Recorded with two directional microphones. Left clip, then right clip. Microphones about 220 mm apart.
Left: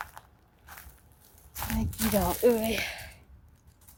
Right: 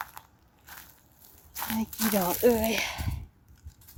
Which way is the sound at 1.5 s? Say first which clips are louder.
Right 2 dB; 20° right (ahead or behind).